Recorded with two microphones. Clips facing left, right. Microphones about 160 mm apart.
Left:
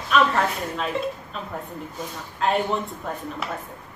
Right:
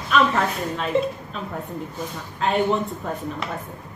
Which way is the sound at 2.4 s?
Centre (ahead or behind).